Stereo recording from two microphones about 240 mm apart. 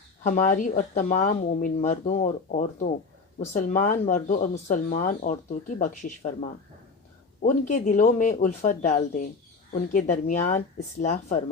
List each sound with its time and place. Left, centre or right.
0.2 s speech: left